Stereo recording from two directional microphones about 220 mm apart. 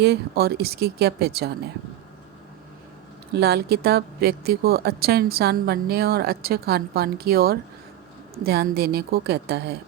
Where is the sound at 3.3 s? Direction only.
45° right (ahead or behind).